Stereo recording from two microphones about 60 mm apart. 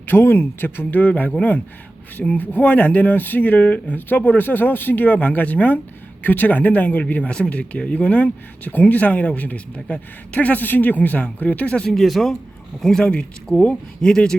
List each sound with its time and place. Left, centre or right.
0.0 s speech: left; by 14.3 s centre